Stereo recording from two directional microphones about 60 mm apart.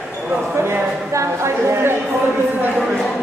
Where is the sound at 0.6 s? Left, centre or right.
Right.